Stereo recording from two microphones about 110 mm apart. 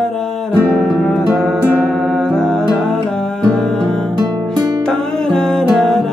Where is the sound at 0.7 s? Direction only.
5° left (ahead or behind).